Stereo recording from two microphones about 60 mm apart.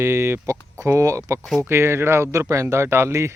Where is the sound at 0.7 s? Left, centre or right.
Right.